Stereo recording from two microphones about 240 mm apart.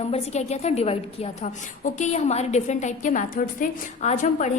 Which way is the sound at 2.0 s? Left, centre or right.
Left.